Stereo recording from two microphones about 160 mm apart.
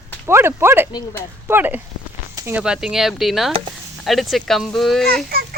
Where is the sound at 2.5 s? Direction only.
5° right (ahead or behind).